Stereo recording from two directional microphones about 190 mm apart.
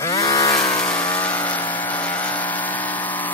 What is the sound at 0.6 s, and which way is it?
Vehicle, 25° left (ahead or behind).